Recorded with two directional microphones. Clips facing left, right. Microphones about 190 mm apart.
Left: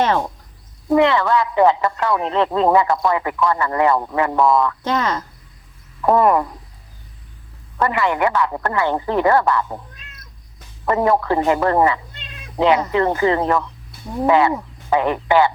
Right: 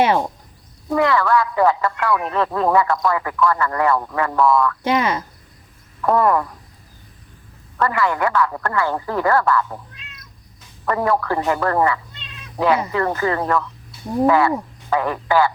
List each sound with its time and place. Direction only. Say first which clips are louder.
0.0 s speech: right 1 dB; 10° right (ahead or behind)
0.9 s a man's voice: left 2 dB; 20° left (ahead or behind)
4.8 s speech: right 1 dB; 10° right (ahead or behind)
6.0 s a man's voice: left 2 dB; 20° left (ahead or behind)
7.8 s a man's voice: left 1 dB; 20° left (ahead or behind)
10.8 s a man's voice: left 3 dB; 20° left (ahead or behind)